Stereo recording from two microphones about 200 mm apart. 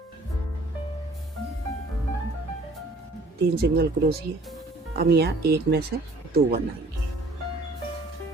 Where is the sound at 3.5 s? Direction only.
50° right (ahead or behind).